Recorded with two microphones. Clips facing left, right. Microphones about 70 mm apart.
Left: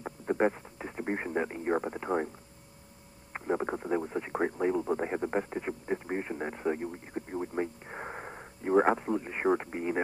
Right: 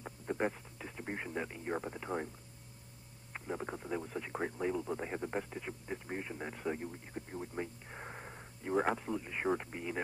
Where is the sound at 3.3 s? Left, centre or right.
Left.